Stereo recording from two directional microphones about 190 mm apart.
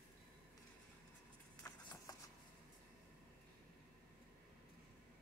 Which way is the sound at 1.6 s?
20° left (ahead or behind).